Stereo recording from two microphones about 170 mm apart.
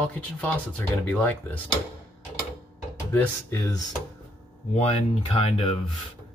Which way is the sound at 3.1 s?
10° left (ahead or behind).